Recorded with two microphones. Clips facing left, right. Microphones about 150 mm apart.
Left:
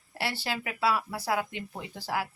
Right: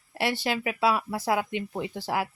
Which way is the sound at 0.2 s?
15° right (ahead or behind).